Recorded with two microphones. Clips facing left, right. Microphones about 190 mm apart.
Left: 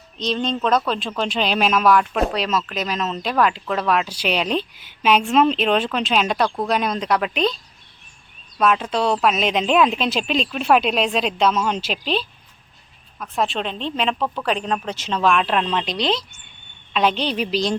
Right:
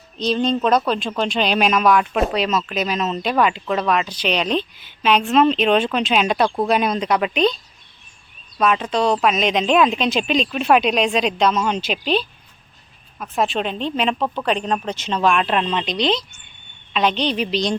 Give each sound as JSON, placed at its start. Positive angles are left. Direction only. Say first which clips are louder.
{"t": 0.2, "sound": "speech", "louder": "right 4 dB", "side_deg": -5}
{"t": 8.5, "sound": "speech", "louder": "right 1 dB", "side_deg": 0}